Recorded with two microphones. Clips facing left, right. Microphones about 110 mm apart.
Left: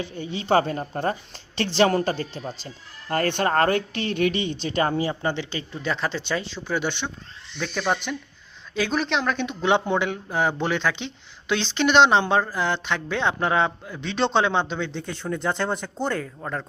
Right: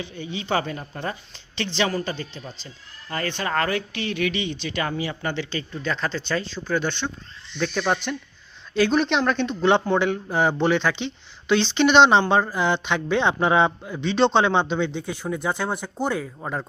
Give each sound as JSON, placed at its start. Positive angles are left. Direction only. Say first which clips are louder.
{"t": 0.0, "sound": "speech", "louder": "left 2 dB", "side_deg": 40}
{"t": 5.3, "sound": "speech", "louder": "right 1 dB", "side_deg": 20}
{"t": 7.6, "sound": "speech", "louder": "right 2 dB", "side_deg": 0}